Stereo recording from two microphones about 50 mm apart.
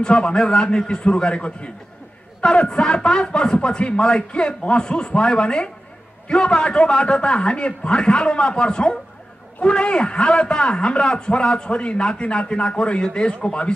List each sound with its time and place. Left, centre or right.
0.0 s a man's voice: centre